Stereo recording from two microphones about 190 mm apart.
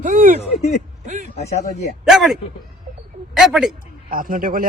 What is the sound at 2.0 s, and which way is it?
A man's voice, centre (ahead or behind).